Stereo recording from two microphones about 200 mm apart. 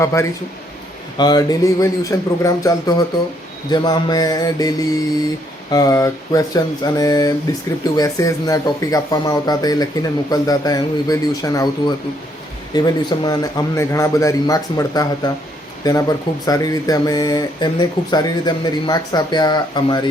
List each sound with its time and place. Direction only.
0.0 s a man's voice: 15° left (ahead or behind)
5.7 s a man's voice: 15° left (ahead or behind)